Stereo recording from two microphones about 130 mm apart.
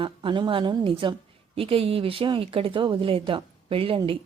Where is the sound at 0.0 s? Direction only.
40° right (ahead or behind).